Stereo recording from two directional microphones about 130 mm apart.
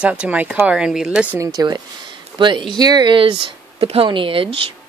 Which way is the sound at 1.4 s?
30° right (ahead or behind).